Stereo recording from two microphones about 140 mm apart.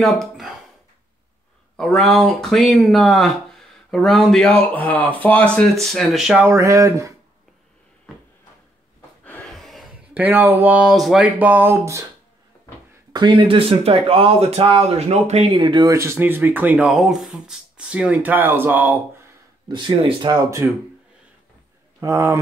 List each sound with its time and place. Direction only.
0.0 s speech: centre (ahead or behind)
1.8 s speech: centre (ahead or behind)
6.4 s speech: 20° right (ahead or behind)
9.5 s gasp: centre (ahead or behind)
10.1 s speech: 15° right (ahead or behind)
13.1 s speech: 35° right (ahead or behind); by 15.5 s 50° right (ahead or behind)
15.5 s speech: 35° right (ahead or behind)
15.9 s speech: 20° right (ahead or behind)
19.7 s speech: 35° right (ahead or behind)
22.0 s speech: 20° right (ahead or behind)